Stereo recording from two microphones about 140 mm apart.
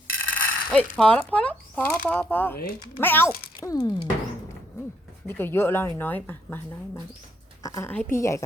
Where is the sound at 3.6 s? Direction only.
30° left (ahead or behind).